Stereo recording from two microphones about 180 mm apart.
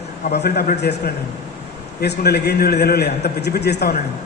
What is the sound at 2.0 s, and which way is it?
A man's voice, 65° left (ahead or behind).